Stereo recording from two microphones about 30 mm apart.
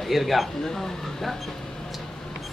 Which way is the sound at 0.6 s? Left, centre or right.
Centre.